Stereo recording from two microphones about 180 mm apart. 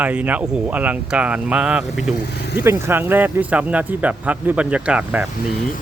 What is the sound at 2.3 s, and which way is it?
Speech, 65° left (ahead or behind).